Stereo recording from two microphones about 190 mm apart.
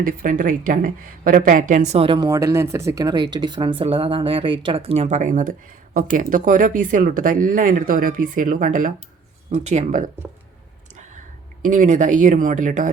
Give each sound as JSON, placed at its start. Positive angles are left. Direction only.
{"t": 0.0, "sound": "a woman's voice", "side_deg": -45}
{"t": 11.6, "sound": "a woman's voice", "side_deg": -40}